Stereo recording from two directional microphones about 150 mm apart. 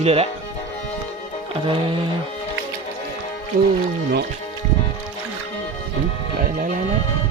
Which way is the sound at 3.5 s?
65° right (ahead or behind).